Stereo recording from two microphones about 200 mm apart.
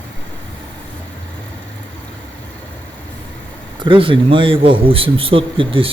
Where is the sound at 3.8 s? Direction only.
25° right (ahead or behind).